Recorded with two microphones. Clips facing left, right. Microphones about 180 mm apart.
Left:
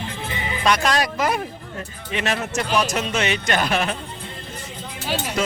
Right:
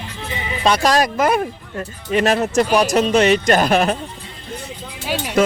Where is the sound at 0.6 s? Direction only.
35° right (ahead or behind).